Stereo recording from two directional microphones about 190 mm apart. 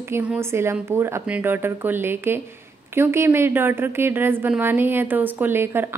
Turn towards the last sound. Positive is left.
turn(degrees=-10)  # may be behind; listen again after turning